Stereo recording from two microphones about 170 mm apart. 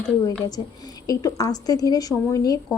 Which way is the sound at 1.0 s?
20° left (ahead or behind).